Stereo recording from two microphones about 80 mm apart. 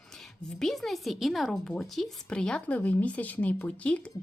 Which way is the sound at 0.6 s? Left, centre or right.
Centre.